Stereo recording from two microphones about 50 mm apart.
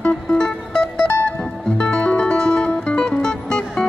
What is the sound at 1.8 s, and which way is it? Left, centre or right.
Music, left.